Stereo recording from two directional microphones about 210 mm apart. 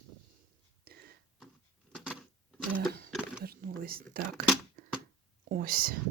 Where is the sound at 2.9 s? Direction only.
45° right (ahead or behind).